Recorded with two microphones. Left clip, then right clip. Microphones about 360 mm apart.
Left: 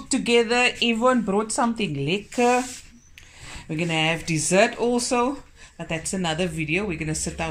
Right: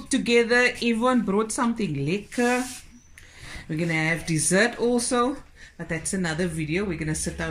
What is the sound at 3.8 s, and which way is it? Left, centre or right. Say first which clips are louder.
Speech: left 2 dB; centre.